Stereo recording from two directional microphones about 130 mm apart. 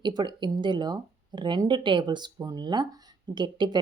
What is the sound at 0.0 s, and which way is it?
Speech, 35° right (ahead or behind).